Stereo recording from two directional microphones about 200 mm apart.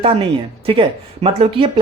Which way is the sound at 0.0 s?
30° right (ahead or behind).